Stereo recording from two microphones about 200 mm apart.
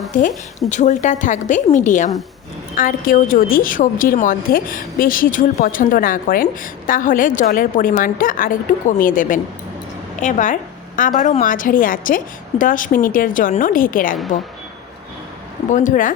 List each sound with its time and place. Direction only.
0.1 s a woman's voice: 40° left (ahead or behind)
15.7 s a woman's voice: 40° left (ahead or behind)